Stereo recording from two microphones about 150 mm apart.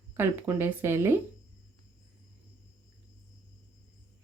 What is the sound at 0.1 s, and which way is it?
Speech, 15° right (ahead or behind).